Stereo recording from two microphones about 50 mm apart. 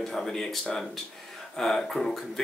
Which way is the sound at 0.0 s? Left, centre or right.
Centre.